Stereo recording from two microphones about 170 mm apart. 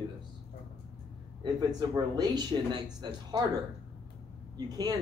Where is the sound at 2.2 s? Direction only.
25° right (ahead or behind).